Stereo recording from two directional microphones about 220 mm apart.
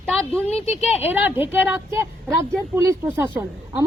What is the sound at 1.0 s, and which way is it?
A woman's voice, 10° right (ahead or behind).